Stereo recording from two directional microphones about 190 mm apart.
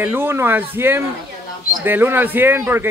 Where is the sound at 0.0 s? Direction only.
10° right (ahead or behind).